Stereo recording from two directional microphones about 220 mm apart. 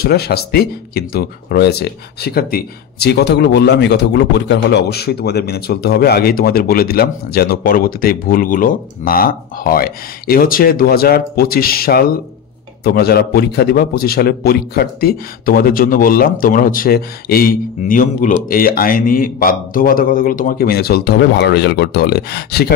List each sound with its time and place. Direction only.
0.0 s speech: 45° left (ahead or behind)